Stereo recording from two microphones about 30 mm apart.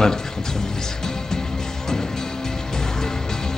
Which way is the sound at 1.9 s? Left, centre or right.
Centre.